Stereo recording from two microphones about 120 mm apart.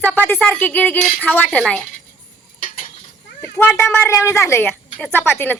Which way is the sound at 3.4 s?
15° left (ahead or behind).